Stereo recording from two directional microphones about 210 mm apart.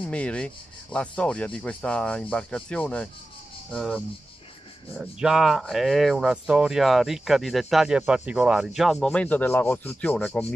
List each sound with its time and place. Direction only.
0.0 s speech: 5° left (ahead or behind)